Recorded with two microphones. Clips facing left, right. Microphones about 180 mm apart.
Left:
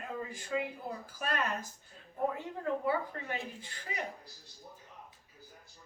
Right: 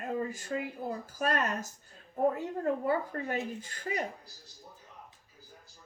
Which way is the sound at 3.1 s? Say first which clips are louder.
Right 7 dB; 45° right (ahead or behind).